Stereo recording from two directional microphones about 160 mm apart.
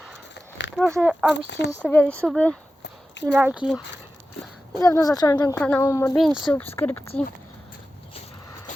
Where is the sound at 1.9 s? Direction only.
10° left (ahead or behind).